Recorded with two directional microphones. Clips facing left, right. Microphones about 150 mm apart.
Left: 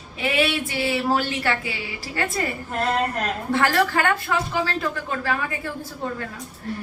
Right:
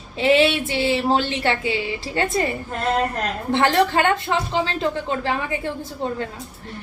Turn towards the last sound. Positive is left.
turn(degrees=-25)  # may be behind; listen again after turning